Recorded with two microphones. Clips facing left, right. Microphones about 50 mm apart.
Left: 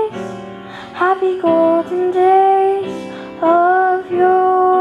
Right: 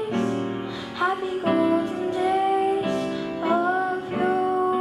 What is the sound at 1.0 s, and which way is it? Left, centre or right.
Music, left.